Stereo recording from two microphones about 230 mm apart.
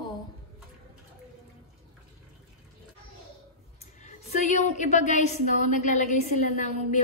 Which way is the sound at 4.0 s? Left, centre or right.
Left.